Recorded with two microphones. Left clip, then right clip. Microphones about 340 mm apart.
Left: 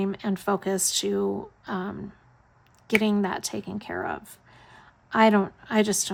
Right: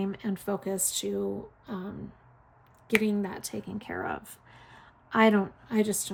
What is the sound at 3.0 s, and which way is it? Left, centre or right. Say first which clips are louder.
Speech: left 5 dB; centre.